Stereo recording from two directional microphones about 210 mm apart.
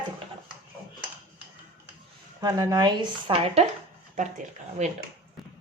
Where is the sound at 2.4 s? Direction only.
15° right (ahead or behind).